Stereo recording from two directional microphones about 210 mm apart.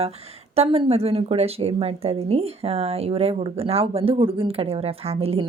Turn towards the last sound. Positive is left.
turn(degrees=-30)  # may be behind; listen again after turning